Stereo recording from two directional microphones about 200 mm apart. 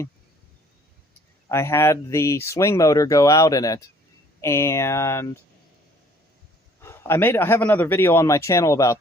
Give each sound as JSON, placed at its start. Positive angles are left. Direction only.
{"t": 1.5, "sound": "speech", "side_deg": 10}
{"t": 6.8, "sound": "speech", "side_deg": 10}